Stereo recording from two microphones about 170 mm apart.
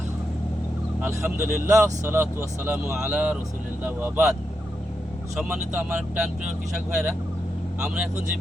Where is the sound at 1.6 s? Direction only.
15° right (ahead or behind).